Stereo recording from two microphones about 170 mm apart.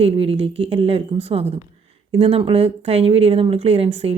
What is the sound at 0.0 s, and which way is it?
Speech, 35° right (ahead or behind).